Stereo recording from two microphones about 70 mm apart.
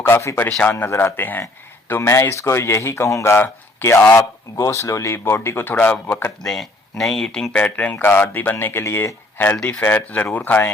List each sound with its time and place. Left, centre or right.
0.1 s speech: left
0.6 s speech: left
1.9 s speech: left
3.3 s speech: left
4.5 s speech: left
5.1 s speech: left
5.7 s speech: centre
6.1 s speech: left
6.4 s speech: centre; by 9.1 s left
9.6 s speech: left